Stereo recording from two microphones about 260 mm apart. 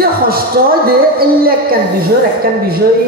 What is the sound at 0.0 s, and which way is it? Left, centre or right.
A woman's voice, right.